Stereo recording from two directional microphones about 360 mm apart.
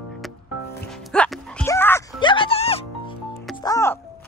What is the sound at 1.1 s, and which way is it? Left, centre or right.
Music, centre.